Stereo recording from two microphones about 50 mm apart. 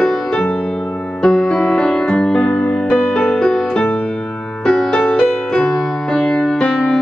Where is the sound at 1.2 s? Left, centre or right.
Centre.